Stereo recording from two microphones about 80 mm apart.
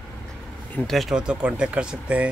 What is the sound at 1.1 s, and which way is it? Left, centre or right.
Speech, centre.